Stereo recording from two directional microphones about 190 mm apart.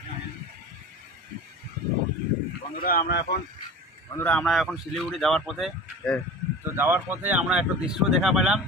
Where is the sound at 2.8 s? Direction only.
50° left (ahead or behind).